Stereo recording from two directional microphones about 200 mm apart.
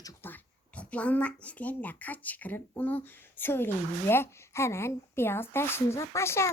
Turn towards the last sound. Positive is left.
turn(degrees=15)  # may be behind; listen again after turning